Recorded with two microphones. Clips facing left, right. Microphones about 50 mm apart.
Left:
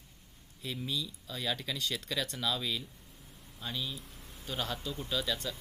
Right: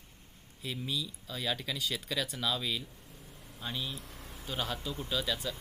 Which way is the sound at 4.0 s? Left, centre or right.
Right.